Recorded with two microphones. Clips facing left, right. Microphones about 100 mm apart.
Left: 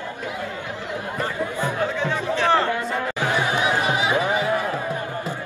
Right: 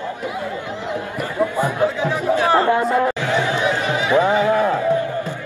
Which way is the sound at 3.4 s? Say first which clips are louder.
Right 2 dB; 15° left (ahead or behind).